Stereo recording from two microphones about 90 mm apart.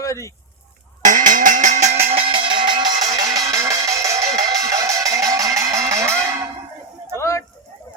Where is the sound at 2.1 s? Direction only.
85° right; by 3.2 s 55° right (ahead or behind).